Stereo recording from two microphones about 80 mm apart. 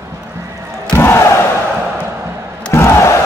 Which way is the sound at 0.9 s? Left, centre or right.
Left.